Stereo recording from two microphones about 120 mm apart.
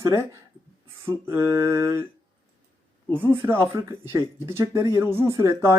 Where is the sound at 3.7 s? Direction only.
30° right (ahead or behind).